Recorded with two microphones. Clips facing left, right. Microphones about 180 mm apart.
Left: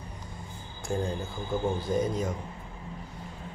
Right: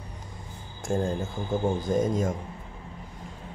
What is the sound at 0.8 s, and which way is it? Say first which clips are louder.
Speech: right 4 dB; 45° right (ahead or behind).